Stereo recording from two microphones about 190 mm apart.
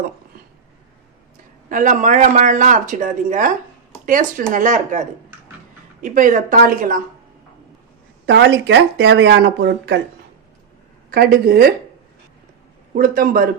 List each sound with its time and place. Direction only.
1.7 s speech: 40° right (ahead or behind)
8.3 s speech: 60° right (ahead or behind)
11.1 s speech: 55° right (ahead or behind)
12.9 s speech: 50° right (ahead or behind)